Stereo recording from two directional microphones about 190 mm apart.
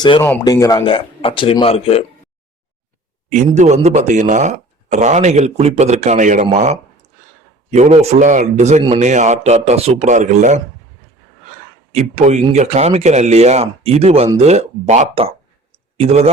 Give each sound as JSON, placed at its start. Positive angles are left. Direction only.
{"t": 0.2, "sound": "speech", "side_deg": 15}
{"t": 3.2, "sound": "speech", "side_deg": -40}
{"t": 11.9, "sound": "speech", "side_deg": -35}